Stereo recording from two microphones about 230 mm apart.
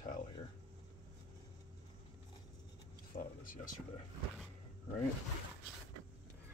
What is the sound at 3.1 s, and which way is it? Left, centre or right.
Speech, left.